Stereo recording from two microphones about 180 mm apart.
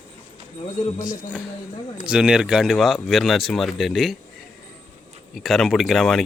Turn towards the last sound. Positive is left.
turn(degrees=0)  # may be behind; listen again after turning